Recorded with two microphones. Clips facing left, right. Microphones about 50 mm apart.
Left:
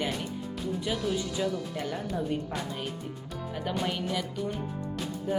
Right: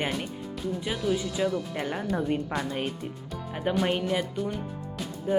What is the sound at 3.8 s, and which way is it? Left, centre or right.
Speech, right.